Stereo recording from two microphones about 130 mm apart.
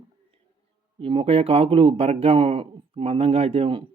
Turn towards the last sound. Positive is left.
turn(degrees=-45)  # may be behind; listen again after turning